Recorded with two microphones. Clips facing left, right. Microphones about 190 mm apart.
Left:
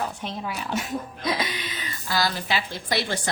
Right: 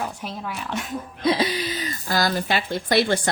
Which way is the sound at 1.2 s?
30° right (ahead or behind).